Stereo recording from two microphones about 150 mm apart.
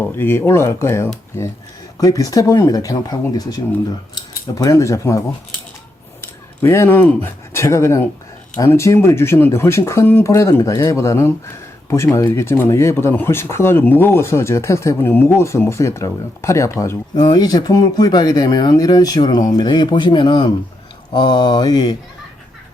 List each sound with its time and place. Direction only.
0.0 s speech: 15° left (ahead or behind)
6.2 s speech: 15° left (ahead or behind)